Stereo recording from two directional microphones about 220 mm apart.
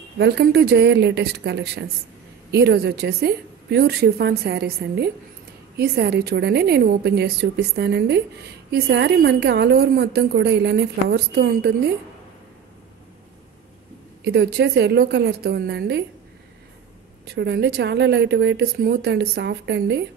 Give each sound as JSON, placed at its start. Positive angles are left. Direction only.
{"t": 0.2, "sound": "a woman's voice", "side_deg": -50}
{"t": 14.2, "sound": "a woman's voice", "side_deg": -50}
{"t": 17.3, "sound": "a woman's voice", "side_deg": -50}